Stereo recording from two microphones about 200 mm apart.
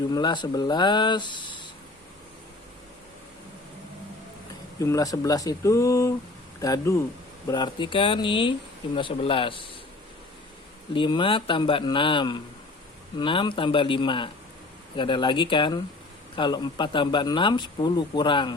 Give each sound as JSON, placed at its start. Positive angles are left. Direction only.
{"t": 0.1, "sound": "speech", "side_deg": 20}
{"t": 4.8, "sound": "speech", "side_deg": 15}
{"t": 10.9, "sound": "speech", "side_deg": 25}